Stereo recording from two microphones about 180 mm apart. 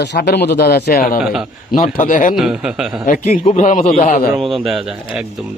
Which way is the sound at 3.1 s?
45° left (ahead or behind).